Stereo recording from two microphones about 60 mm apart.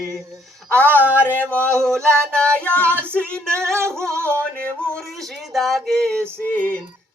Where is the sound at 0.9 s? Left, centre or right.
Left.